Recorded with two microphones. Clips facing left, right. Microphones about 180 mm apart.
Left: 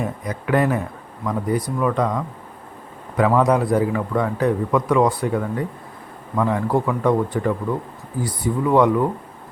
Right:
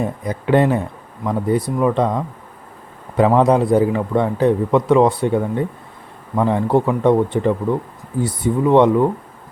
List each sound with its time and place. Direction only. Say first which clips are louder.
0.0 s a man's voice: right 4 dB; 30° right (ahead or behind)